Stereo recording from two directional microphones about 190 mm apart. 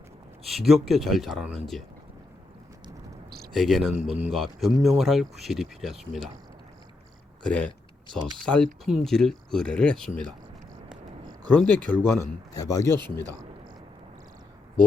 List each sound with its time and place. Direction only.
0.4 s speech: centre (ahead or behind)
3.2 s a sound: 55° right (ahead or behind)
3.5 s speech: centre (ahead or behind)
7.4 s speech: 5° left (ahead or behind)
11.5 s speech: 10° left (ahead or behind)